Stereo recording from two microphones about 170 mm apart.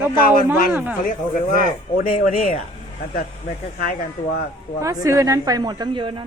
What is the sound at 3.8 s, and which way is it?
Speech, 60° left (ahead or behind).